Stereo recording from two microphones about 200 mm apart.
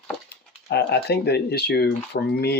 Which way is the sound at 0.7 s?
55° left (ahead or behind).